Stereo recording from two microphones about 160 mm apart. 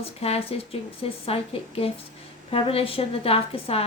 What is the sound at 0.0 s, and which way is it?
A woman's voice, 40° left (ahead or behind).